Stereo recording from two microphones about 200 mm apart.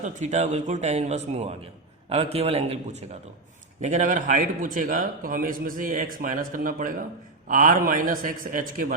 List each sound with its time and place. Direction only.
0.0 s a man's voice: 35° right (ahead or behind)